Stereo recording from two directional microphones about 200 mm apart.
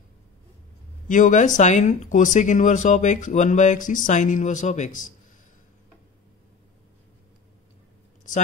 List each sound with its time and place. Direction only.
1.0 s speech: 40° left (ahead or behind)